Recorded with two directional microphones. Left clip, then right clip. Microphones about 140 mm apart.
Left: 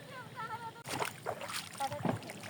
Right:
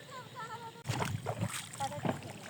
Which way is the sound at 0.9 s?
Centre (ahead or behind).